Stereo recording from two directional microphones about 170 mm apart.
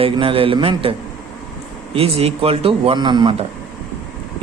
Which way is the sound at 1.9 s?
35° right (ahead or behind).